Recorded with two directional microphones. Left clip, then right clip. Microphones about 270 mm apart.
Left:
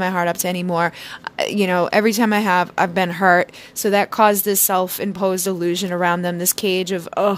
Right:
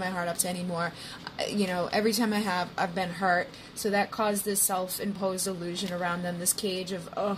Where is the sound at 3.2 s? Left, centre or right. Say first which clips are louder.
Left 12 dB; left.